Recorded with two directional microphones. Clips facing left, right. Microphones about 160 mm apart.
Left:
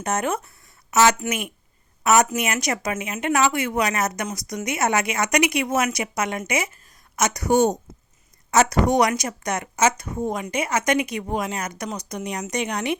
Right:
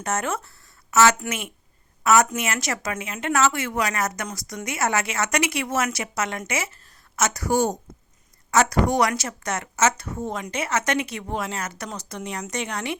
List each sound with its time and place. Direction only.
0.0 s a woman's voice: 20° left (ahead or behind)